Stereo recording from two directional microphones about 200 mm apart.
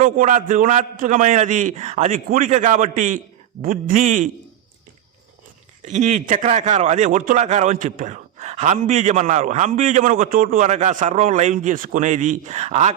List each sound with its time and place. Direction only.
0.0 s speech: 40° right (ahead or behind)
5.8 s speech: 40° right (ahead or behind)